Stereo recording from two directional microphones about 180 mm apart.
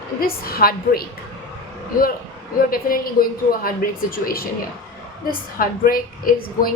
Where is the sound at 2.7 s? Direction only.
50° left (ahead or behind).